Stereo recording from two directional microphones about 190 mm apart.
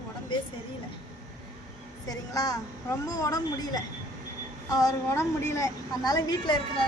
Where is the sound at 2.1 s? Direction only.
20° left (ahead or behind).